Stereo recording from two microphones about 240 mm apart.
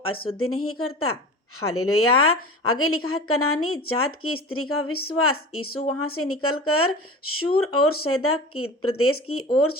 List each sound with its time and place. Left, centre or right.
0.3 s speech: left